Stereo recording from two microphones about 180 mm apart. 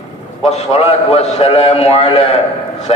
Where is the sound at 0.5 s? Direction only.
35° left (ahead or behind).